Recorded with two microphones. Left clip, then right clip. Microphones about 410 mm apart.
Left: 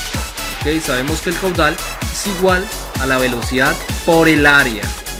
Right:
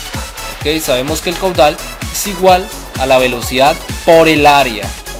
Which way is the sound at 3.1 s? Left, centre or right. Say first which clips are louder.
Right 6 dB; centre.